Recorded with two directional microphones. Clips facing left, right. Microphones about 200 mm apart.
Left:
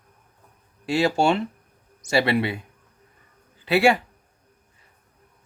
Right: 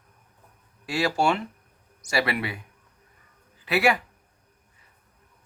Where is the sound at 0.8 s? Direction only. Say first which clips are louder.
Left 4 dB; 25° left (ahead or behind).